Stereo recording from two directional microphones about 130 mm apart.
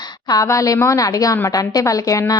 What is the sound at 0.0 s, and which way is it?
A woman's voice, 30° left (ahead or behind).